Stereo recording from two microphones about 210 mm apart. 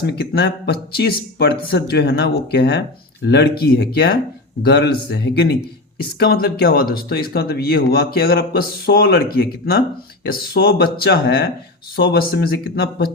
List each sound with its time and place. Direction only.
0.0 s speech: 50° left (ahead or behind)